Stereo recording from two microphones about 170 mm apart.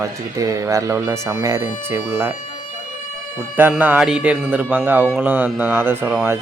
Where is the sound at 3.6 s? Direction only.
10° right (ahead or behind).